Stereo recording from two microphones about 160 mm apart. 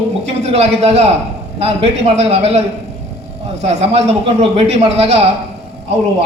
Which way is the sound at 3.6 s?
40° right (ahead or behind).